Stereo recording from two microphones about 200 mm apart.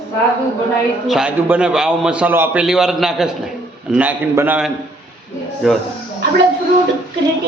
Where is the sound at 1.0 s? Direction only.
Centre (ahead or behind).